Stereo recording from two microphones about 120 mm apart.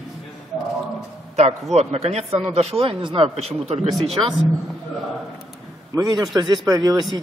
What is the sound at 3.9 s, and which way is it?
Speech, centre (ahead or behind).